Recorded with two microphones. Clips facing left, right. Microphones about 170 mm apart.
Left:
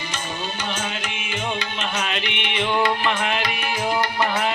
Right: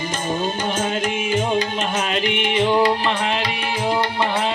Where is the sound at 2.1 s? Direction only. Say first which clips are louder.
Right 7 dB; 45° right (ahead or behind).